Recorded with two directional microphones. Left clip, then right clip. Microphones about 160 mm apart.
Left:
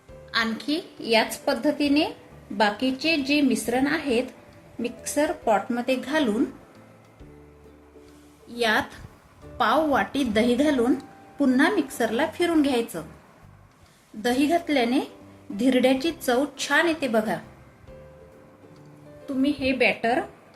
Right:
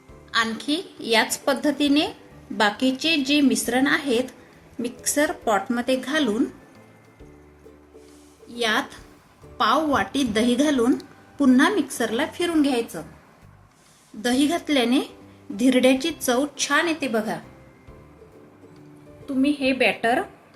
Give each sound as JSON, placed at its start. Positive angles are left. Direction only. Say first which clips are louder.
{"t": 0.3, "sound": "a woman's voice", "louder": "right 2 dB", "side_deg": -10}
{"t": 1.0, "sound": "a woman's voice", "louder": "right 2 dB", "side_deg": -20}
{"t": 8.4, "sound": "a woman's voice", "louder": "even", "side_deg": -5}
{"t": 14.2, "sound": "a woman's voice", "louder": "even", "side_deg": -15}
{"t": 19.2, "sound": "a woman's voice", "louder": "right 3 dB", "side_deg": -5}